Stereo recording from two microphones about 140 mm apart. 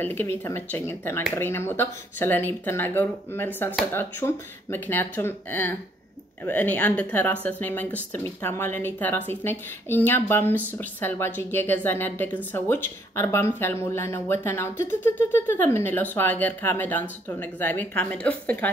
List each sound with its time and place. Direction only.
0.0 s speech: 15° left (ahead or behind)